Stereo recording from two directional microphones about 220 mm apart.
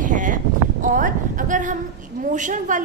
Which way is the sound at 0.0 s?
35° right (ahead or behind).